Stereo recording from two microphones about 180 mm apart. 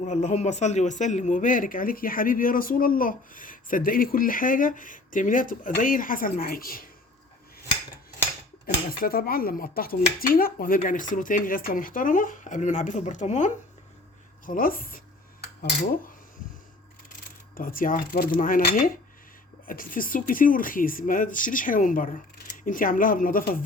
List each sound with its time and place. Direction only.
0.0 s speech: 40° left (ahead or behind)
8.9 s speech: 55° left (ahead or behind)
17.5 s speech: 50° left (ahead or behind)